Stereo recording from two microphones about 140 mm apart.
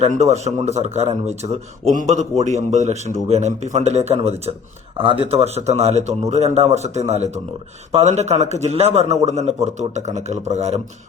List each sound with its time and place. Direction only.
0.0 s a man's voice: 50° right (ahead or behind)